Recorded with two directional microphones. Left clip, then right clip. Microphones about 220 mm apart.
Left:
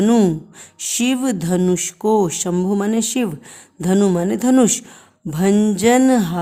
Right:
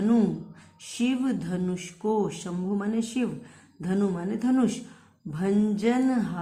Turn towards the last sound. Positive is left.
turn(degrees=50)  # may be behind; listen again after turning